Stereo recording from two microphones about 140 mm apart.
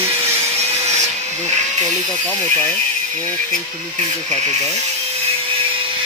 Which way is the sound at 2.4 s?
10° left (ahead or behind).